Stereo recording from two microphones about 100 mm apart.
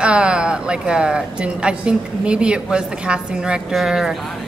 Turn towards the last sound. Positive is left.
turn(degrees=-5)  # may be behind; listen again after turning